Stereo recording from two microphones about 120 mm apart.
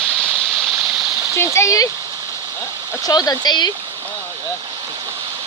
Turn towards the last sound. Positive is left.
turn(degrees=35)  # may be behind; listen again after turning